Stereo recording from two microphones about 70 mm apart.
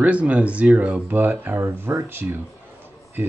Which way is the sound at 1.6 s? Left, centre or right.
Right.